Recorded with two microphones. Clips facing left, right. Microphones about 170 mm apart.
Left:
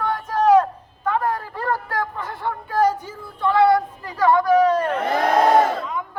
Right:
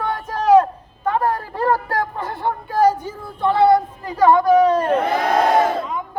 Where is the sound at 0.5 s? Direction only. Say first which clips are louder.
Right 8 dB; 25° right (ahead or behind).